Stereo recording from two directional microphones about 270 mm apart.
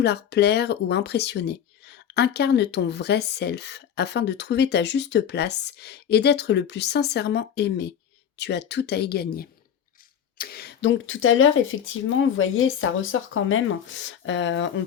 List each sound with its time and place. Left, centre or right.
0.0 s speech: left